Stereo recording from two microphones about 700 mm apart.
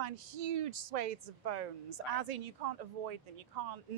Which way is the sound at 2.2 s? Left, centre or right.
Right.